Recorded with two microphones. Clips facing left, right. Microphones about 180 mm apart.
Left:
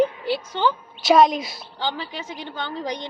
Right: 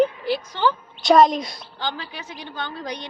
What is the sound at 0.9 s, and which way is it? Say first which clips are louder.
A woman's voice: right 1 dB; centre (ahead or behind).